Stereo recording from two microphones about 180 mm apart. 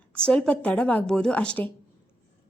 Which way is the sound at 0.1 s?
5° left (ahead or behind).